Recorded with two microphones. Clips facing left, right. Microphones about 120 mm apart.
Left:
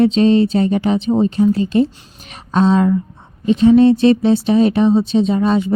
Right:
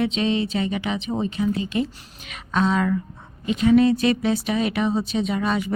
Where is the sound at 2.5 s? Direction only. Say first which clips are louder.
Left 7 dB; 30° left (ahead or behind).